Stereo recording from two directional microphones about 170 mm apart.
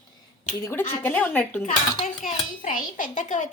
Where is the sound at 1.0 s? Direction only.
10° left (ahead or behind).